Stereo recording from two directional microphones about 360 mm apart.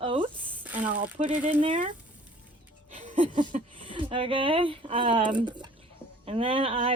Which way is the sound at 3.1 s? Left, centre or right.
Right.